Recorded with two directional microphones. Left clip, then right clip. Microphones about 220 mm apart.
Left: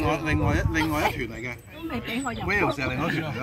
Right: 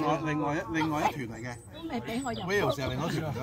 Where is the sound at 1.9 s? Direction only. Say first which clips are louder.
Left 3 dB; 50° right (ahead or behind).